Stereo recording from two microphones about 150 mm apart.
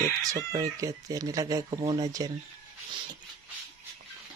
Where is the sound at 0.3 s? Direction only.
25° right (ahead or behind).